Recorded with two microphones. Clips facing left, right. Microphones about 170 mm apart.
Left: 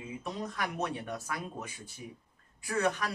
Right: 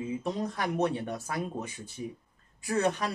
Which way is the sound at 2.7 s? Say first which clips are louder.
Right 3 dB; 25° right (ahead or behind).